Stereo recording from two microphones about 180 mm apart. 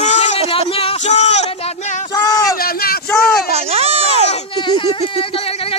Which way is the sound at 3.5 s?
35° right (ahead or behind).